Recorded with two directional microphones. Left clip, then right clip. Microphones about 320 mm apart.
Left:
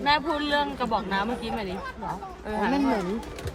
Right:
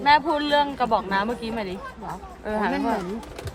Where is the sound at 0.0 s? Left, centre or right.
Right.